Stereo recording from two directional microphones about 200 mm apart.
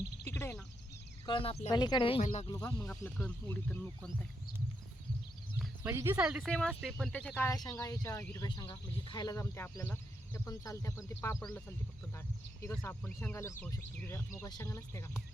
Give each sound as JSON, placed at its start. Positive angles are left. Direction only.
{"t": 0.3, "sound": "bird", "side_deg": 15}
{"t": 1.3, "sound": "speech", "side_deg": 25}
{"t": 2.5, "sound": "speech", "side_deg": 15}
{"t": 5.5, "sound": "speech", "side_deg": -10}
{"t": 12.6, "sound": "speech", "side_deg": 10}